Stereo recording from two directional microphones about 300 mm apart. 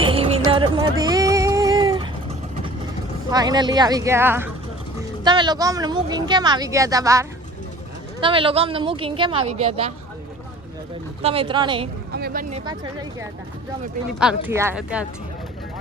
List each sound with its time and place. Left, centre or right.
0.0 s music: centre
3.2 s a woman's voice: centre
11.2 s a woman's voice: centre
12.1 s a woman's voice: right; by 15.0 s centre